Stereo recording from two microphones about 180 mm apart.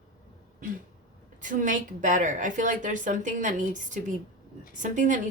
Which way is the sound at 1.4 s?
45° right (ahead or behind).